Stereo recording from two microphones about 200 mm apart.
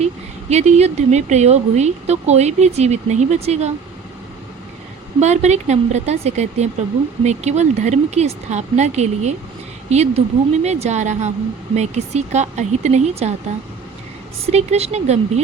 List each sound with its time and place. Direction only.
0.5 s speech: 35° right (ahead or behind)
5.2 s speech: 35° right (ahead or behind)
14.4 s speech: 30° right (ahead or behind)